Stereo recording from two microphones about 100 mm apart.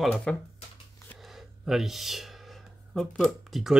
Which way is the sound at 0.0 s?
10° left (ahead or behind).